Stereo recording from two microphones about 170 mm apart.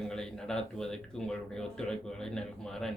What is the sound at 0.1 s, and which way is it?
Speech, 5° left (ahead or behind).